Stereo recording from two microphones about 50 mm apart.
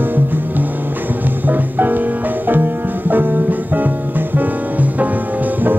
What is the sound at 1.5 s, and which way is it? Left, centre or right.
Music, right.